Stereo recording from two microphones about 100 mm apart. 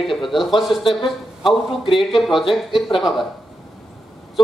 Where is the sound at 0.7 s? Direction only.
60° left (ahead or behind).